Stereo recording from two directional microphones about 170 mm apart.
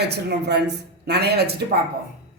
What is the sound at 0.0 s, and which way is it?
Speech, 75° right (ahead or behind).